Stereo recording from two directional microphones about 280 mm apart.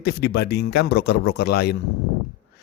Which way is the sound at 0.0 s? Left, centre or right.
Left.